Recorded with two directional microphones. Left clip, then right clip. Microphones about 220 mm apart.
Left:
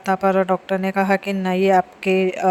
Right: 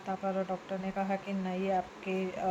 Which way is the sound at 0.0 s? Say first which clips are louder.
Left 16 dB; 50° left (ahead or behind).